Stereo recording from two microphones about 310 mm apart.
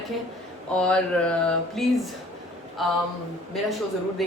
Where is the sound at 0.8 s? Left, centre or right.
Centre.